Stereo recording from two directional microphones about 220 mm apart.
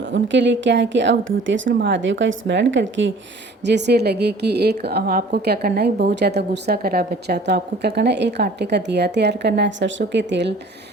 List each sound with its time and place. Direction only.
0.1 s a woman's voice: 55° right (ahead or behind)